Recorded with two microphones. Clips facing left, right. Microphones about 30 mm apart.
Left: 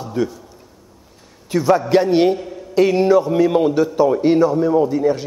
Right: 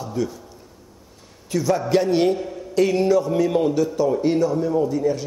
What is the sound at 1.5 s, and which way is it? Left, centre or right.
A man's voice, left.